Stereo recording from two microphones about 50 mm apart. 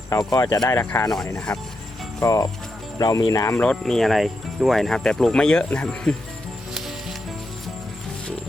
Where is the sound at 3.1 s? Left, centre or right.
Left.